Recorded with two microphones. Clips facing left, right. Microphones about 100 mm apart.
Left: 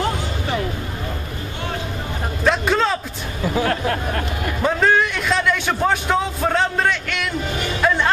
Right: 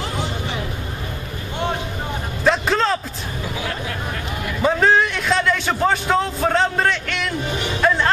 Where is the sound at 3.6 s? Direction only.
50° left (ahead or behind).